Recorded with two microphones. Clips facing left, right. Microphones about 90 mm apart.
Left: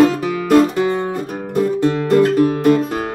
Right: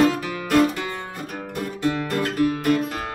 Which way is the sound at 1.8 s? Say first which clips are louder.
Left 8 dB; 30° left (ahead or behind).